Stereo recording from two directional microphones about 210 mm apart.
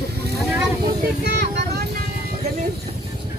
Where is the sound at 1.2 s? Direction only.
55° right (ahead or behind).